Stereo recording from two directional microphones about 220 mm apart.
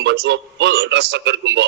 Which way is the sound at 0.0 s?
50° right (ahead or behind).